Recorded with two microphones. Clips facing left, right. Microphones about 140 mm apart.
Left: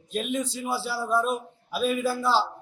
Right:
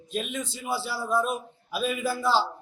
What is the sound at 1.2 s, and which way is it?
A man's voice, 5° right (ahead or behind).